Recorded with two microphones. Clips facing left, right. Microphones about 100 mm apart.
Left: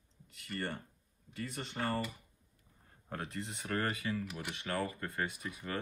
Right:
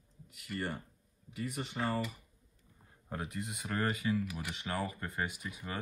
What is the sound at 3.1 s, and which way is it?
Speech, 10° right (ahead or behind).